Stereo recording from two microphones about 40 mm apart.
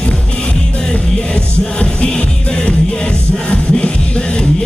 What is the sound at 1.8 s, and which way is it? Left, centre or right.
Music, left.